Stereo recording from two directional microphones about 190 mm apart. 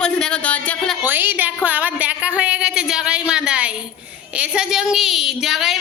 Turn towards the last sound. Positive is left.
turn(degrees=0)  # may be behind; listen again after turning